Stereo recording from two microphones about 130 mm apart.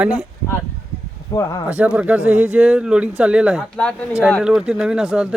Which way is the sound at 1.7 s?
10° right (ahead or behind).